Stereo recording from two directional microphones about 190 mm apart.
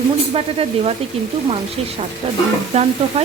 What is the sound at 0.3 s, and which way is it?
Speech, 30° right (ahead or behind).